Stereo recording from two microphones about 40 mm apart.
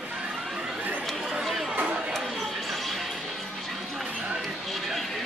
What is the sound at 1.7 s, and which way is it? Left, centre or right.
Chatter, right.